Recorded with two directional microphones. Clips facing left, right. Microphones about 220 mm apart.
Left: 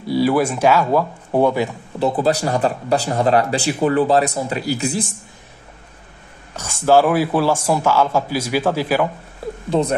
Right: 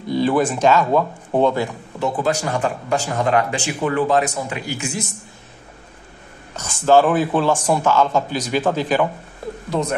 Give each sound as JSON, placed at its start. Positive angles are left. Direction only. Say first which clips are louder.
{"t": 0.1, "sound": "speech", "louder": "left 1 dB", "side_deg": 10}
{"t": 2.0, "sound": "speech", "louder": "left 3 dB", "side_deg": 35}
{"t": 6.5, "sound": "speech", "louder": "even", "side_deg": 10}
{"t": 9.7, "sound": "speech", "louder": "left 4 dB", "side_deg": 30}